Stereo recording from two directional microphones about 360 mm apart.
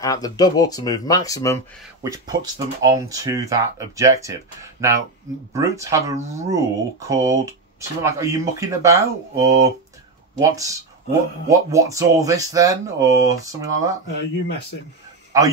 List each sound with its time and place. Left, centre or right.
0.0 s speech: centre
2.0 s speech: centre
14.0 s speech: left
15.3 s a man's voice: centre